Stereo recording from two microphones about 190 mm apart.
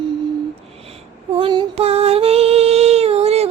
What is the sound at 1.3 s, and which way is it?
Child singing, 25° right (ahead or behind).